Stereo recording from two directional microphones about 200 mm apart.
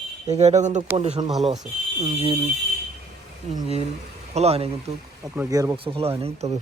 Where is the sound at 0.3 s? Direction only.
35° right (ahead or behind).